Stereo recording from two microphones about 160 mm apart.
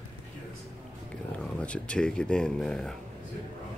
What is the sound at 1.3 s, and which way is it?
Speech, 5° left (ahead or behind).